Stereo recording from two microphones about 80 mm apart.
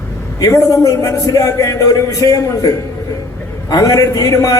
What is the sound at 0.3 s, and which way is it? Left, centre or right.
A man's voice, left.